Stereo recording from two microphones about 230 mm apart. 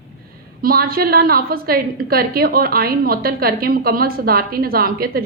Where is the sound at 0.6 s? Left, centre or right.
Right.